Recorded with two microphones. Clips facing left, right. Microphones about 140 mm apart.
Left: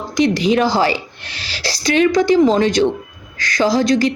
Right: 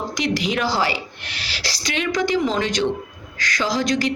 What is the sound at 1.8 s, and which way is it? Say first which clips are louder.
A woman's voice: left 9 dB; 40° left (ahead or behind).